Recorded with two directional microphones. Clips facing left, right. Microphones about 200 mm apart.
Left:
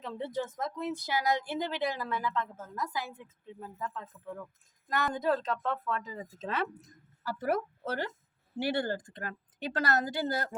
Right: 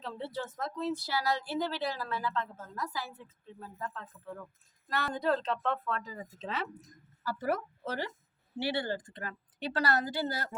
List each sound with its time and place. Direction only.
0.0 s speech: 15° left (ahead or behind)
6.4 s speech: 55° left (ahead or behind)